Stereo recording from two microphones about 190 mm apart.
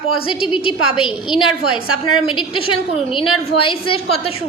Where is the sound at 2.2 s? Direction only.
25° left (ahead or behind).